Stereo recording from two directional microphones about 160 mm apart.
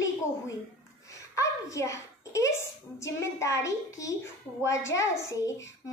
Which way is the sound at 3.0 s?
20° left (ahead or behind).